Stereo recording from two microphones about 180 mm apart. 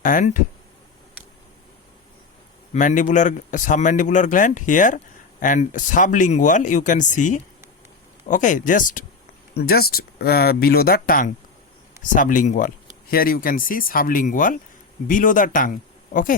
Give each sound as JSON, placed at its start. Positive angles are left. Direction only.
{"t": 0.0, "sound": "speech", "side_deg": 45}
{"t": 2.7, "sound": "speech", "side_deg": 45}
{"t": 9.6, "sound": "speech", "side_deg": 60}